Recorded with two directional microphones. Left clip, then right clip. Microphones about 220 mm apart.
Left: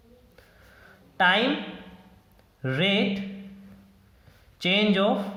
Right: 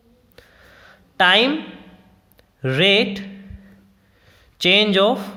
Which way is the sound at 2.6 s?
45° right (ahead or behind).